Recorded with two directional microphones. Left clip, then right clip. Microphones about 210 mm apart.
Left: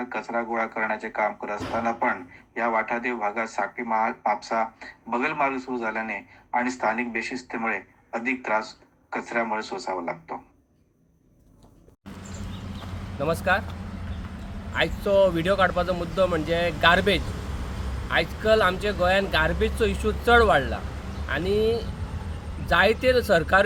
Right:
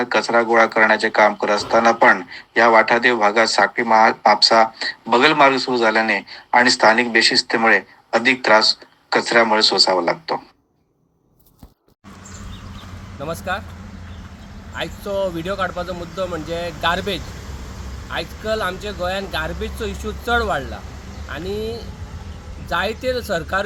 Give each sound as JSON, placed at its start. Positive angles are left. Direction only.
{"t": 0.0, "sound": "speech", "side_deg": -55}
{"t": 13.1, "sound": "speech", "side_deg": 5}
{"t": 14.8, "sound": "speech", "side_deg": 5}